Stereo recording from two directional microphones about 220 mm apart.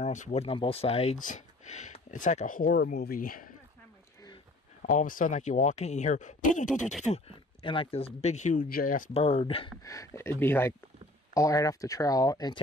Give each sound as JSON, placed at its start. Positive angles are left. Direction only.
{"t": 0.0, "sound": "speech", "side_deg": 30}
{"t": 4.8, "sound": "speech", "side_deg": 40}
{"t": 6.7, "sound": "a sound", "side_deg": 0}
{"t": 7.0, "sound": "speech", "side_deg": 30}
{"t": 9.1, "sound": "speech", "side_deg": 25}
{"t": 9.8, "sound": "speech", "side_deg": 15}